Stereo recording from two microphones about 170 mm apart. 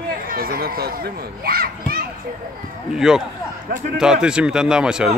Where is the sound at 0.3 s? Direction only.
60° right (ahead or behind).